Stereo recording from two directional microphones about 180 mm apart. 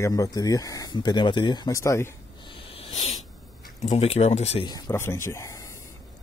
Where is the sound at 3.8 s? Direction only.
35° left (ahead or behind).